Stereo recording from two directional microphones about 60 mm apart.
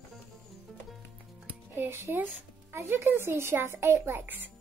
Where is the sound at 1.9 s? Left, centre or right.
Right.